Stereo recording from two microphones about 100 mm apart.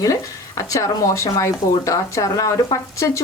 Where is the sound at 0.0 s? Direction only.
35° left (ahead or behind).